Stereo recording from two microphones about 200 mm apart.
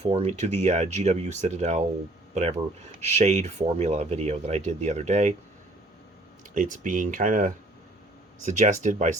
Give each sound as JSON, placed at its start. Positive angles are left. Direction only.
{"t": 0.0, "sound": "speech", "side_deg": -30}
{"t": 6.5, "sound": "speech", "side_deg": -40}